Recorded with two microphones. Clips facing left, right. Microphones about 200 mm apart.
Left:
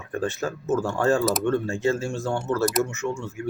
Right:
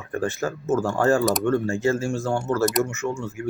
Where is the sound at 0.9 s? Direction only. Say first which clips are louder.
Right 2 dB; 15° left (ahead or behind).